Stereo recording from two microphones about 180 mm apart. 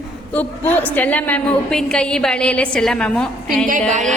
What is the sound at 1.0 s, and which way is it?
A woman's voice, 10° left (ahead or behind).